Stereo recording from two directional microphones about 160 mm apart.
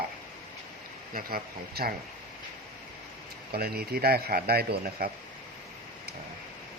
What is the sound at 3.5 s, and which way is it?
A man's voice, 75° right (ahead or behind).